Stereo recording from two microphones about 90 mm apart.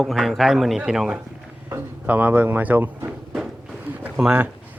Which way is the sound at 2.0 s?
20° right (ahead or behind).